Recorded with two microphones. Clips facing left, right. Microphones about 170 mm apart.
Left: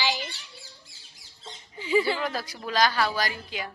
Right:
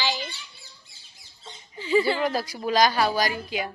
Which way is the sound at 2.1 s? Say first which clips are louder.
Right 5 dB; 15° right (ahead or behind).